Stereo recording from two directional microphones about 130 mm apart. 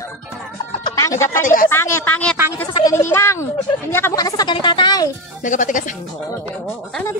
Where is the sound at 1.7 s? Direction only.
20° left (ahead or behind).